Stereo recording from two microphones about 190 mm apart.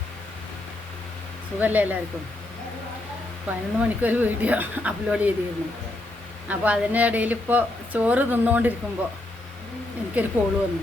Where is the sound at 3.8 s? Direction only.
10° right (ahead or behind).